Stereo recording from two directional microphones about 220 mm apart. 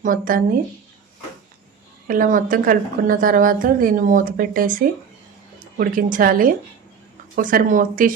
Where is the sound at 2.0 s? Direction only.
40° right (ahead or behind).